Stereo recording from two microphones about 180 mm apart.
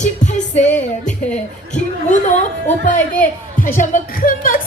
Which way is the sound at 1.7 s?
40° left (ahead or behind).